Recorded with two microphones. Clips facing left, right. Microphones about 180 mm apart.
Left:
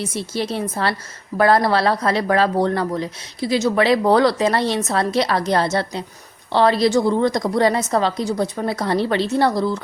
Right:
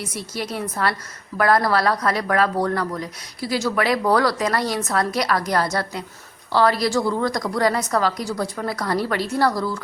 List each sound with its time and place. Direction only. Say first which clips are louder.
0.0 s speech: left 5 dB; 25° left (ahead or behind)